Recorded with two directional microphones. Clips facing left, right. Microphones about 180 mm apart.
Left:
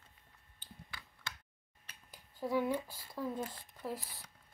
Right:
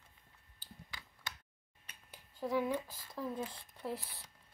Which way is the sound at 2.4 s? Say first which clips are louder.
Left 1 dB; centre (ahead or behind).